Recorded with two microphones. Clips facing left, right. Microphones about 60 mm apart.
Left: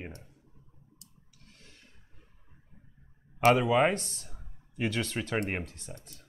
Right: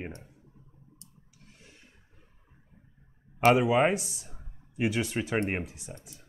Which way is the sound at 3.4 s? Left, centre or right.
Centre.